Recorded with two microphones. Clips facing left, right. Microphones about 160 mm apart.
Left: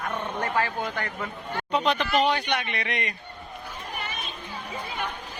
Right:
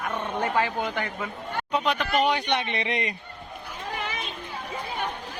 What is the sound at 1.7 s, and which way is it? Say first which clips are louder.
A man's voice: left 1 dB; 5° right (ahead or behind).